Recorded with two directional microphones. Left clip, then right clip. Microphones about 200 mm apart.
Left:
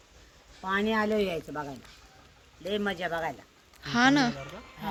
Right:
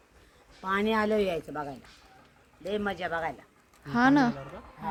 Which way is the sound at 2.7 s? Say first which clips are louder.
Left 1 dB; 45° left (ahead or behind).